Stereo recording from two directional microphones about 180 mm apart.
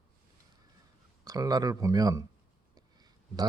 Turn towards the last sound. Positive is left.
turn(degrees=-20)  # may be behind; listen again after turning